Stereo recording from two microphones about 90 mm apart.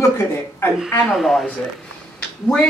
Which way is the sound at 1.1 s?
Centre (ahead or behind).